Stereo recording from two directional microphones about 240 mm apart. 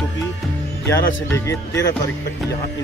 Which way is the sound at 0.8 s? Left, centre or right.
Centre.